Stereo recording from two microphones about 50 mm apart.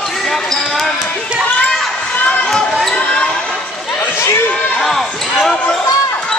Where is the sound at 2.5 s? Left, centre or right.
Centre.